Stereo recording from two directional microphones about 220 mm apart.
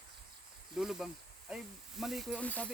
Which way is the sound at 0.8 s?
Centre (ahead or behind).